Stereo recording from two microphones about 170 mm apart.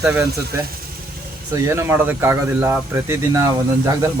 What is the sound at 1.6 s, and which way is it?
A man's voice, 15° right (ahead or behind).